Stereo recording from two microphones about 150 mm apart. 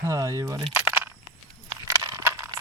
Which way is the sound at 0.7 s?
15° right (ahead or behind).